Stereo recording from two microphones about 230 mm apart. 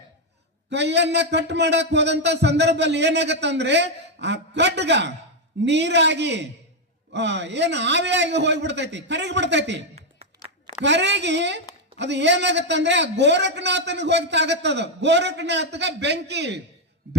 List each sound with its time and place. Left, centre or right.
0.7 s a man's voice: right
10.8 s a man's voice: right